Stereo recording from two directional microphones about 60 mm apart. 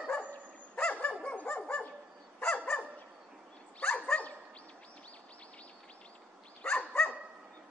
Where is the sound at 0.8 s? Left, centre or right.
Centre.